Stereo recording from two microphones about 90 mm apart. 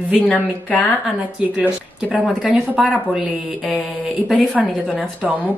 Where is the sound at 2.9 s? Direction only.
5° right (ahead or behind).